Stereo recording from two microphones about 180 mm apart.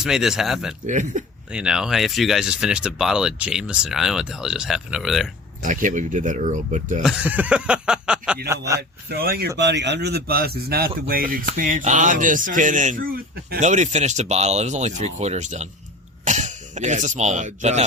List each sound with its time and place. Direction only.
0.0 s speech: centre (ahead or behind)
0.9 s speech: 45° right (ahead or behind)
1.5 s speech: 5° right (ahead or behind)
5.6 s speech: 45° right (ahead or behind)
7.0 s speech: 5° right (ahead or behind)
9.0 s speech: 55° right (ahead or behind)
9.6 s speech: 75° right (ahead or behind); by 17.8 s 40° right (ahead or behind)